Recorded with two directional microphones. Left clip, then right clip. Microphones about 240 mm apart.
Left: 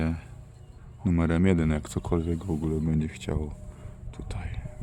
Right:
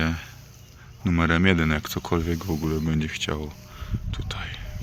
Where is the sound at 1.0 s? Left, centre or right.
Centre.